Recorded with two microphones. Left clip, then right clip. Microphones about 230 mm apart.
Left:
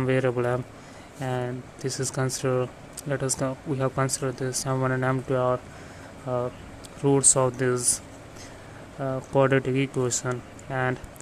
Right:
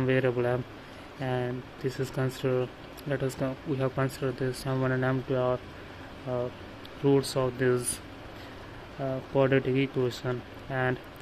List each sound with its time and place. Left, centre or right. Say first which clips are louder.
0.0 s speech: left 2 dB; centre
9.0 s speech: left 4 dB; centre